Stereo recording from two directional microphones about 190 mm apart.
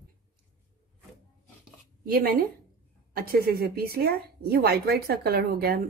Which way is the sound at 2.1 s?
50° right (ahead or behind).